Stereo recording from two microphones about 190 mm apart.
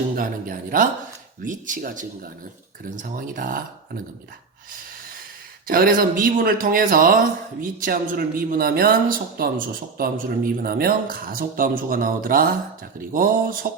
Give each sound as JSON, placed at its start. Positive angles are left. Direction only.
{"t": 0.2, "sound": "a woman's voice", "side_deg": -45}
{"t": 5.6, "sound": "a woman's voice", "side_deg": -50}